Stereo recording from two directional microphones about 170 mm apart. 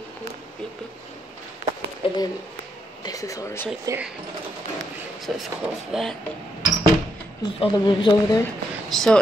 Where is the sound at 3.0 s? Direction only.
20° left (ahead or behind).